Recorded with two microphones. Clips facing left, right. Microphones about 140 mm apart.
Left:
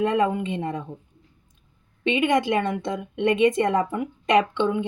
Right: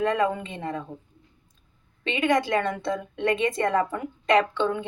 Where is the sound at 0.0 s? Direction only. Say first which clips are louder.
Left 2 dB; 20° left (ahead or behind).